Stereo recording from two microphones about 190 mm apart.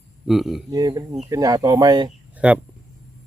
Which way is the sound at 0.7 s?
20° right (ahead or behind).